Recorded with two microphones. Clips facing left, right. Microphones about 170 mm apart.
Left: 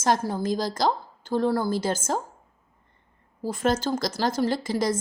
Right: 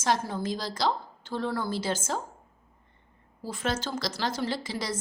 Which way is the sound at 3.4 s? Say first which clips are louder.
Left 7 dB; 45° left (ahead or behind).